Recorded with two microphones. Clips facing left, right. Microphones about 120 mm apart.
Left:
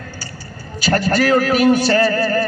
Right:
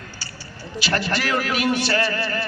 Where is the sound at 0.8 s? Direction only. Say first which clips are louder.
Left 8 dB; 40° left (ahead or behind).